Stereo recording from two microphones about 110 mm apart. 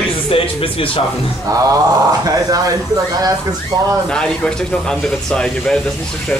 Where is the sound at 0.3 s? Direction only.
55° left (ahead or behind).